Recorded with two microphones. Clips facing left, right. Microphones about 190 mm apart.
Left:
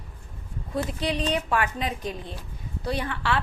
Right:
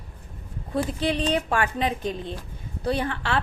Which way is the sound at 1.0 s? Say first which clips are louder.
Right 2 dB; 30° right (ahead or behind).